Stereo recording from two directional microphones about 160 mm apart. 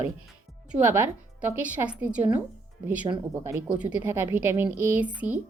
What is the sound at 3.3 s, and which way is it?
A woman's voice, 15° right (ahead or behind).